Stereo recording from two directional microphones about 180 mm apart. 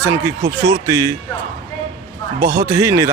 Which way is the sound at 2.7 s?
15° right (ahead or behind).